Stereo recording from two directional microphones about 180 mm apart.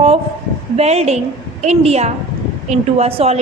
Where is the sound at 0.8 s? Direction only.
35° right (ahead or behind).